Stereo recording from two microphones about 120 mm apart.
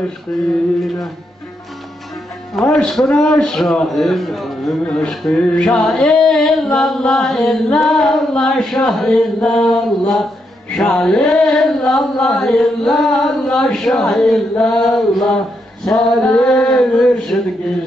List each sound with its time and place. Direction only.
0.3 s a man's voice: 5° left (ahead or behind)
2.7 s a man's voice: 5° left (ahead or behind)